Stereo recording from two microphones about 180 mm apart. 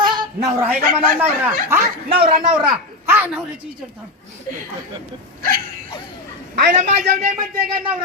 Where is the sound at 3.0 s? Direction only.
10° right (ahead or behind).